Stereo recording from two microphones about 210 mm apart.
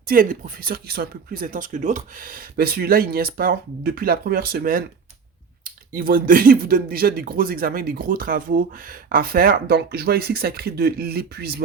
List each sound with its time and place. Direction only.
0.0 s speech: 40° right (ahead or behind)
5.9 s speech: 40° right (ahead or behind)